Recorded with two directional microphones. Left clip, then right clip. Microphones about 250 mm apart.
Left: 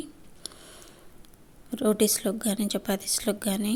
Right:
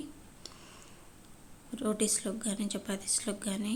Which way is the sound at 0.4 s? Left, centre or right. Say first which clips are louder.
Left 7 dB; left.